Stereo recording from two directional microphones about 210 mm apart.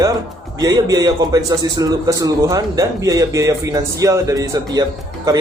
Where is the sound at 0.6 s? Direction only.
20° right (ahead or behind).